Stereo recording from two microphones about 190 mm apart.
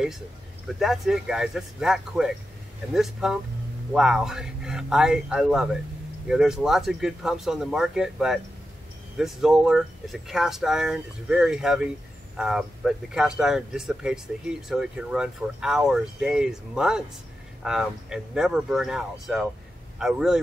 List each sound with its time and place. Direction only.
0.7 s speech: centre (ahead or behind)